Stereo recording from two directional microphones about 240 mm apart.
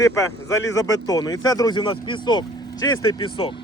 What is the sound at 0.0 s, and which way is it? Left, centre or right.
Speech, centre.